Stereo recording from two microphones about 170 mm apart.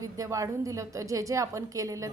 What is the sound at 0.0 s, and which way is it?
A woman's voice, 20° right (ahead or behind).